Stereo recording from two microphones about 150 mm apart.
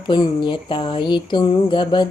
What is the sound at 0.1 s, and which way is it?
Music, 30° left (ahead or behind).